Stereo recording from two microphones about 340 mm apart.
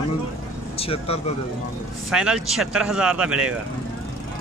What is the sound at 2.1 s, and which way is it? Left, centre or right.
Speech, centre.